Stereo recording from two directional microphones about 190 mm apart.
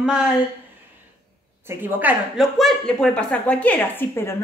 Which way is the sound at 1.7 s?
10° right (ahead or behind).